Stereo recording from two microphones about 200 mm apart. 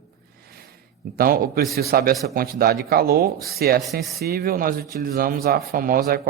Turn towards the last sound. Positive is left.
turn(degrees=-45)  # may be behind; listen again after turning